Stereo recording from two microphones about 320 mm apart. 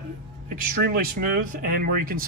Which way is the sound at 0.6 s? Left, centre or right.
Right.